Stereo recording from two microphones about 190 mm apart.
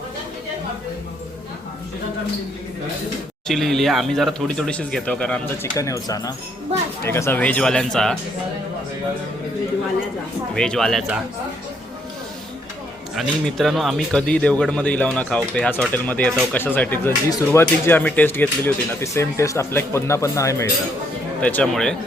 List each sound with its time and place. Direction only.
3.4 s speech: centre (ahead or behind)
5.7 s speech: 15° left (ahead or behind)
10.5 s speech: 5° left (ahead or behind)
13.1 s speech: centre (ahead or behind)